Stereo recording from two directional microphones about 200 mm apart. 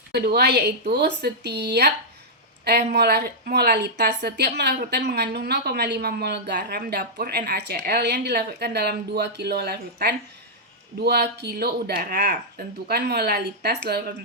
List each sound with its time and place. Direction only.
0.1 s a woman's voice: 50° right (ahead or behind)
2.9 s a woman's voice: 55° right (ahead or behind)